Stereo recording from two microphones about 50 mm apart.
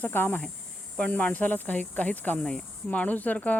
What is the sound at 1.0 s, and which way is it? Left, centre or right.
Speech, left.